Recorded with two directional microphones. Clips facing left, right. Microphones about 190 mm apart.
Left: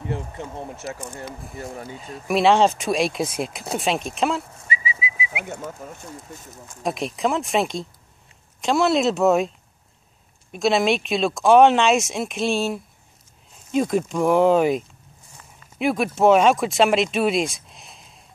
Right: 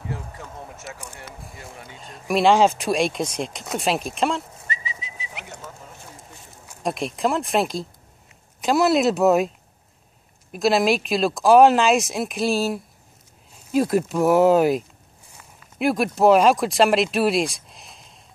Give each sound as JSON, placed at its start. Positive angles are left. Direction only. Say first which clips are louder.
{"t": 0.1, "sound": "speech", "louder": "left 6 dB", "side_deg": 25}
{"t": 0.7, "sound": "speech", "louder": "left 6 dB", "side_deg": 0}
{"t": 5.8, "sound": "speech", "louder": "left 6 dB", "side_deg": 50}
{"t": 6.8, "sound": "speech", "louder": "even", "side_deg": 0}
{"t": 10.5, "sound": "speech", "louder": "right 1 dB", "side_deg": 0}